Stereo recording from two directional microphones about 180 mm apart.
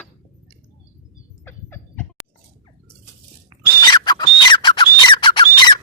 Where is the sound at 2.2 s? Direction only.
5° right (ahead or behind).